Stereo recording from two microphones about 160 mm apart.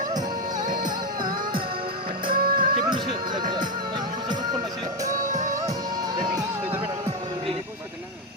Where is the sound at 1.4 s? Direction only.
30° right (ahead or behind).